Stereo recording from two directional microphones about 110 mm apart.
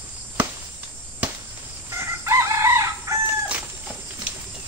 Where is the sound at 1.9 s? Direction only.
25° right (ahead or behind).